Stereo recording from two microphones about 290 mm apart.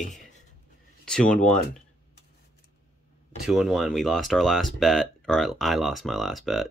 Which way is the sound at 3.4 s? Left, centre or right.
Centre.